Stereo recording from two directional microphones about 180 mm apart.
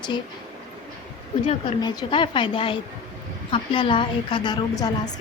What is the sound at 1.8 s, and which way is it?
A woman's voice, 25° left (ahead or behind).